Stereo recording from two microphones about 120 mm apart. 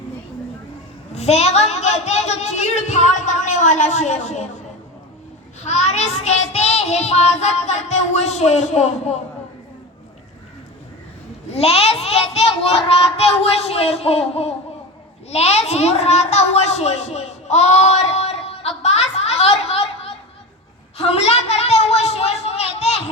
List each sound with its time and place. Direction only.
1.1 s a woman's voice: 65° left (ahead or behind)
5.6 s a woman's voice: 65° left (ahead or behind)
11.5 s a child's voice: 60° left (ahead or behind)
18.8 s a sound: 65° left (ahead or behind)